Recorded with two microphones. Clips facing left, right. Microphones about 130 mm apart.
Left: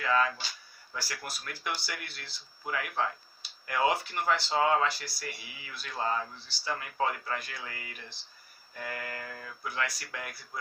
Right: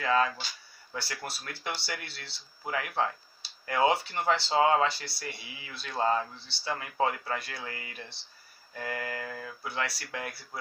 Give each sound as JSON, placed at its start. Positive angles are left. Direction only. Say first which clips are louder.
{"t": 0.0, "sound": "speech", "louder": "right 1 dB", "side_deg": -30}